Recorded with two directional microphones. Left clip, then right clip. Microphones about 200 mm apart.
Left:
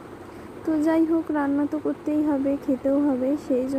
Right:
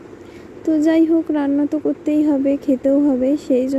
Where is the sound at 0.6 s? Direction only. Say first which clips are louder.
Right 6 dB; 20° right (ahead or behind).